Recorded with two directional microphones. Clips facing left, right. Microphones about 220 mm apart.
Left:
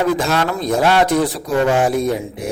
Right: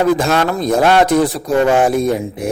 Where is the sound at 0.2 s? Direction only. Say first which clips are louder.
Right 3 dB; 45° right (ahead or behind).